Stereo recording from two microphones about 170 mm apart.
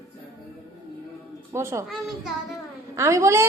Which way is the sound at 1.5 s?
15° right (ahead or behind).